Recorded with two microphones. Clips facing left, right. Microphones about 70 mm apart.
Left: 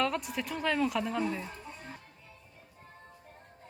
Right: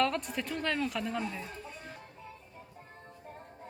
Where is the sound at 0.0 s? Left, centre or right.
Centre.